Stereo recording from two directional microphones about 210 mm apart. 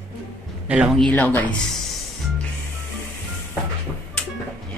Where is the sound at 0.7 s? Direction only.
Centre (ahead or behind).